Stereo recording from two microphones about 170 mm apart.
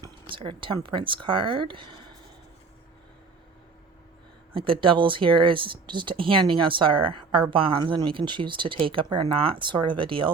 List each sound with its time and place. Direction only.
0.3 s speech: 30° right (ahead or behind)
4.5 s speech: 30° right (ahead or behind)